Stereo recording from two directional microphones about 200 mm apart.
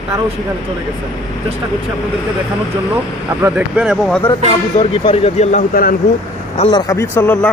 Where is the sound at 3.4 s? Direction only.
5° right (ahead or behind).